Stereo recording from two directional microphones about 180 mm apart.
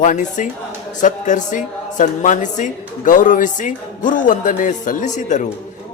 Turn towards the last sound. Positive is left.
turn(degrees=45)  # may be behind; listen again after turning